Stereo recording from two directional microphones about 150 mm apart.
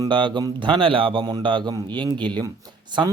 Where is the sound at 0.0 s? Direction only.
30° right (ahead or behind).